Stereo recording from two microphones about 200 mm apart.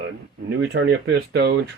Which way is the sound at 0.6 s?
60° right (ahead or behind).